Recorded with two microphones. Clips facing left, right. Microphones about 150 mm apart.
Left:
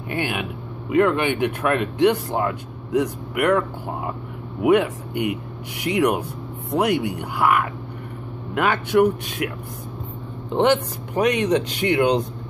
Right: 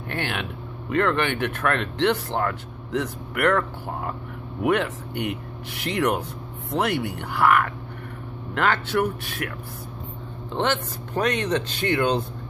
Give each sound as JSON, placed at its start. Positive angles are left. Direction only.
{"t": 0.1, "sound": "speech", "side_deg": 10}
{"t": 10.5, "sound": "speech", "side_deg": 15}